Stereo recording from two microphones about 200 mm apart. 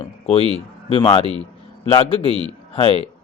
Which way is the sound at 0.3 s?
30° left (ahead or behind).